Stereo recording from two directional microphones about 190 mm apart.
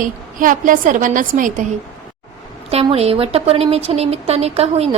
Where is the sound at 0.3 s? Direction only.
45° right (ahead or behind).